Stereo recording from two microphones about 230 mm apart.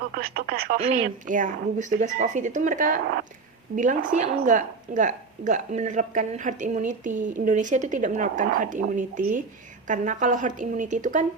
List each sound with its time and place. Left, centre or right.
0.3 s a woman's voice: right